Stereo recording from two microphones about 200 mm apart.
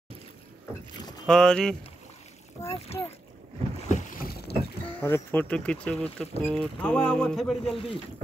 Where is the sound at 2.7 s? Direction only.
30° left (ahead or behind).